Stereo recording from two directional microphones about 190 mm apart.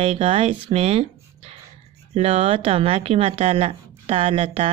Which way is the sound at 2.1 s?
30° right (ahead or behind).